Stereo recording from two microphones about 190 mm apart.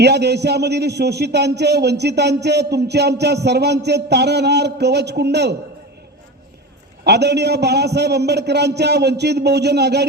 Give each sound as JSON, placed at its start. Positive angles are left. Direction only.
{"t": 0.0, "sound": "a man's voice", "side_deg": -60}
{"t": 7.0, "sound": "a man's voice", "side_deg": -60}